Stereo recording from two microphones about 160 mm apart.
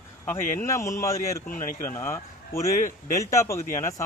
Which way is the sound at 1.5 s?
60° left (ahead or behind).